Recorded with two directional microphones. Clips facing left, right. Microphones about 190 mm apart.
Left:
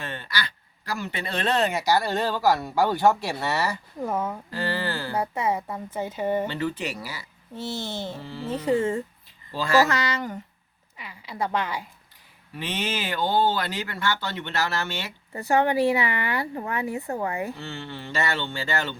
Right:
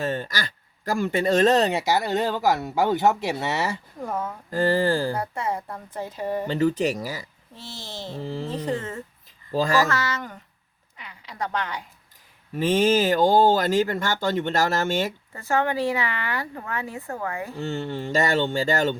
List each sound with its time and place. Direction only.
0.0 s speech: 40° right (ahead or behind)
1.8 s speech: 20° right (ahead or behind)
4.0 s speech: 10° left (ahead or behind)
4.5 s speech: 45° right (ahead or behind)
5.2 s a woman's voice: 5° left (ahead or behind)
6.5 s speech: 45° right (ahead or behind)
8.5 s speech: 10° left (ahead or behind)
9.5 s speech: 45° right (ahead or behind)
9.9 s speech: 15° left (ahead or behind)
10.9 s a sound: 5° left (ahead or behind)
12.5 s speech: 45° right (ahead or behind)
15.3 s speech: 15° left (ahead or behind)
17.6 s speech: 45° right (ahead or behind)